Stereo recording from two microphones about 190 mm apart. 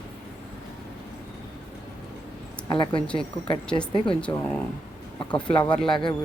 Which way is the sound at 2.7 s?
25° left (ahead or behind).